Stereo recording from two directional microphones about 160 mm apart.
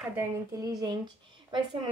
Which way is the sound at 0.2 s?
20° right (ahead or behind).